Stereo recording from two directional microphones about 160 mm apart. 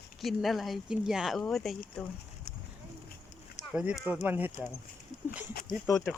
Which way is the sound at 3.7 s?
5° right (ahead or behind).